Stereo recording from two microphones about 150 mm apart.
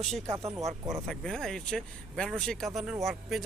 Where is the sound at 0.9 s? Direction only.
5° left (ahead or behind).